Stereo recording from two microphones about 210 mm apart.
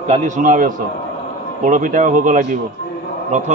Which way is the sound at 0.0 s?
35° right (ahead or behind).